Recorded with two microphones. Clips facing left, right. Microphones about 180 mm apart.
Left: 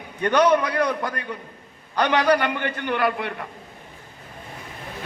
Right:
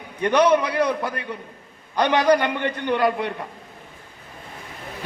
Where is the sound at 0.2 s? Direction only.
25° right (ahead or behind).